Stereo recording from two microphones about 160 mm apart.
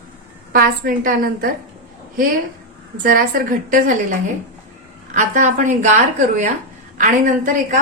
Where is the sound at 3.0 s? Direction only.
60° right (ahead or behind).